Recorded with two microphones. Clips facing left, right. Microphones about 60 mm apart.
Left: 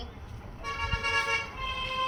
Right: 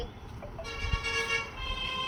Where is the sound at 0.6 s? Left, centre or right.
Left.